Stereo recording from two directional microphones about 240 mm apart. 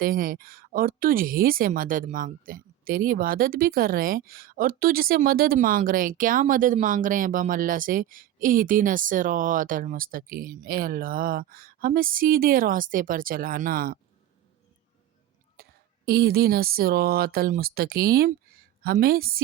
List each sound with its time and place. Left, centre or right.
0.0 s speech: right
15.6 s a sound: right
16.0 s speech: right